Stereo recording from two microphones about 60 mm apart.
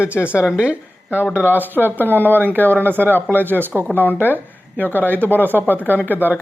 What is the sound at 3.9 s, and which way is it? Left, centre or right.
Speech, left.